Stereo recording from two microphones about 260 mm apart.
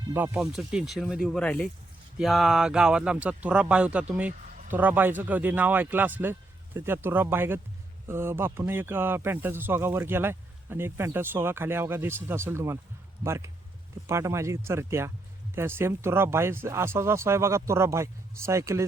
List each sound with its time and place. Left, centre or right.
0.1 s speech: centre
4.4 s a sound: right
4.7 s speech: centre